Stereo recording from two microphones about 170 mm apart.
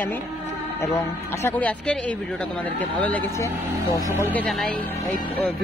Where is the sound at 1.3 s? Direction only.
10° left (ahead or behind).